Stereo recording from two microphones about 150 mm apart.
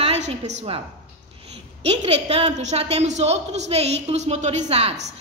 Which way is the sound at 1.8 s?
40° right (ahead or behind).